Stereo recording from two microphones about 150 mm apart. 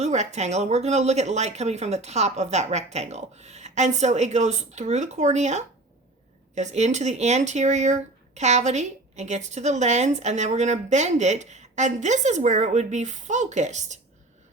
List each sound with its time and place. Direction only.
0.0 s speech: 50° right (ahead or behind)